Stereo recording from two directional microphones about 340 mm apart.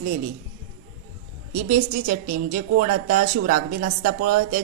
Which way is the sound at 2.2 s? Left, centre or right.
Right.